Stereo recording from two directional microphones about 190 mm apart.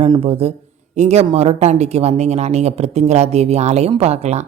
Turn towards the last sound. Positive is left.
turn(degrees=-35)  # may be behind; listen again after turning